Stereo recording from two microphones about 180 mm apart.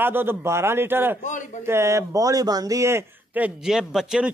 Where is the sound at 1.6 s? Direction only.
15° right (ahead or behind).